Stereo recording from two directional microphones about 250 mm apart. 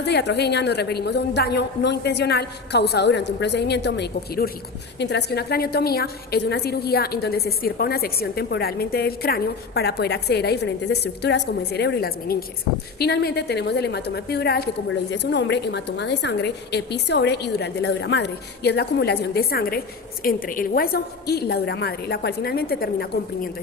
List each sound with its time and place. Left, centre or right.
0.0 s a woman's voice: left